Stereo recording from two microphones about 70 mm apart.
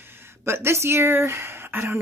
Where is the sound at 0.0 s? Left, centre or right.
Right.